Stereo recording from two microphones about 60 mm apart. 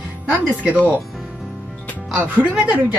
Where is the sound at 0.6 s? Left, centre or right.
Right.